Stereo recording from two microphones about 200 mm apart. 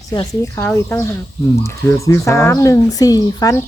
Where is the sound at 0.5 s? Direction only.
10° left (ahead or behind).